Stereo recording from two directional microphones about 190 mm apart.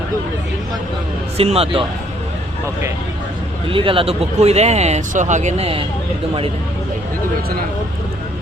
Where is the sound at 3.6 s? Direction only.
30° right (ahead or behind).